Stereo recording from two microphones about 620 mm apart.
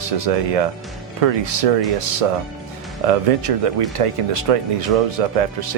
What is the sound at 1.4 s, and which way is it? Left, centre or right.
Speech, right.